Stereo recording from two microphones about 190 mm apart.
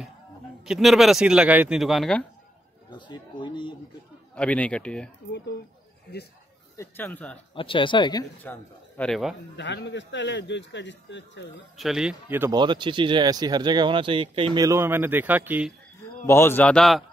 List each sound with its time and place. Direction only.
0.7 s speech: centre (ahead or behind)
2.9 s speech: 25° left (ahead or behind)
4.4 s speech: 5° left (ahead or behind)
6.8 s speech: 10° left (ahead or behind)
7.5 s speech: 25° left (ahead or behind)
8.4 s a man's voice: 10° left (ahead or behind)
9.6 s a man's voice: 65° left (ahead or behind)
11.7 s speech: centre (ahead or behind)
12.5 s speech: 25° right (ahead or behind); by 15.7 s 10° right (ahead or behind)
16.3 s speech: 10° left (ahead or behind)